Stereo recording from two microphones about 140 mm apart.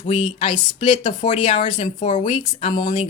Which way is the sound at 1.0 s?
55° left (ahead or behind).